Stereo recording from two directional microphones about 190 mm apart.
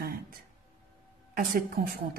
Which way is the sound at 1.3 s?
45° right (ahead or behind).